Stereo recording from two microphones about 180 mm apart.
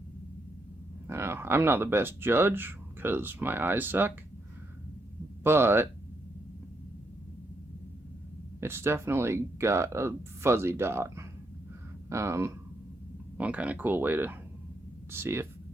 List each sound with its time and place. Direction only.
1.0 s speech: 15° right (ahead or behind)
5.4 s speech: 15° right (ahead or behind)
8.6 s speech: 15° right (ahead or behind)